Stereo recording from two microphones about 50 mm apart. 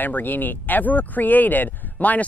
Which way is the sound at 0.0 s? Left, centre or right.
Left.